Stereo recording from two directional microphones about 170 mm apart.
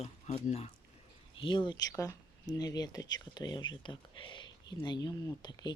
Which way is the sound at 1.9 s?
20° left (ahead or behind).